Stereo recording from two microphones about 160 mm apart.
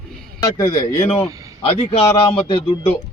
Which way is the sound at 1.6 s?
40° left (ahead or behind).